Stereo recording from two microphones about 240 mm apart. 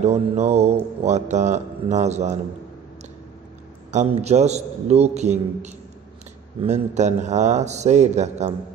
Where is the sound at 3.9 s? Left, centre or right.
Right.